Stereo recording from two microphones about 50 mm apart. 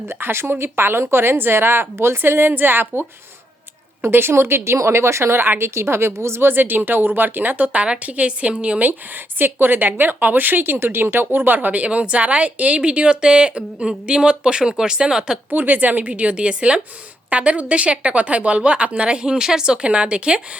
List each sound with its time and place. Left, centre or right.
0.1 s a woman's voice: right
2.5 s a woman's voice: right
5.6 s a woman's voice: right
6.5 s a woman's voice: right
7.7 s a woman's voice: right
15.4 s a woman's voice: right; by 20.4 s centre